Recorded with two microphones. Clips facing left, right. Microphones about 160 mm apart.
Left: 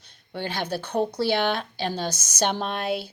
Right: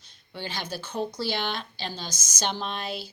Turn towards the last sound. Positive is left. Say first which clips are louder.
# left 6 dB
turn(degrees=60)  # may be behind; listen again after turning